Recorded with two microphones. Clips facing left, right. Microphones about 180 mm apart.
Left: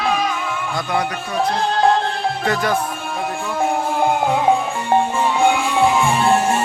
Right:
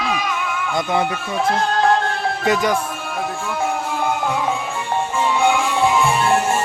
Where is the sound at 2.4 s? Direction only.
15° right (ahead or behind).